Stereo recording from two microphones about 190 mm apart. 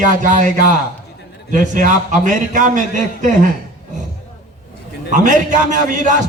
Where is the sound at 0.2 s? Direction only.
45° right (ahead or behind).